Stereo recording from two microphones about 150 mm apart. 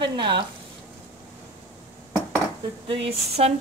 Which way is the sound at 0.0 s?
35° right (ahead or behind).